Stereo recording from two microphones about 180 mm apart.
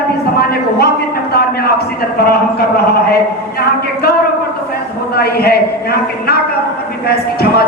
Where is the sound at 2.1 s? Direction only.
60° left (ahead or behind).